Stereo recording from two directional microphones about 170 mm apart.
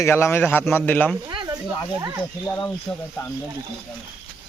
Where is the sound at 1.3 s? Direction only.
25° right (ahead or behind).